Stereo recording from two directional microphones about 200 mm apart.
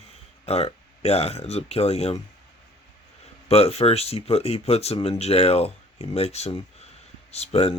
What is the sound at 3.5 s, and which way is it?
Speech, 30° left (ahead or behind).